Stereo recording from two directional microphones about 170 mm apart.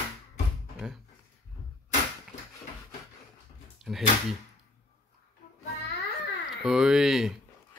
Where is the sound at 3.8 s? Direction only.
Centre (ahead or behind).